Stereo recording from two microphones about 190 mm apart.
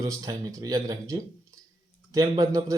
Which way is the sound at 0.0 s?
20° right (ahead or behind).